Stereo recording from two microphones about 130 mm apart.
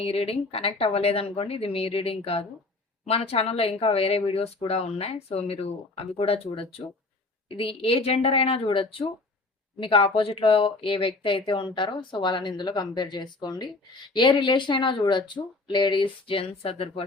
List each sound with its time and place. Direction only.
0.0 s speech: 50° left (ahead or behind)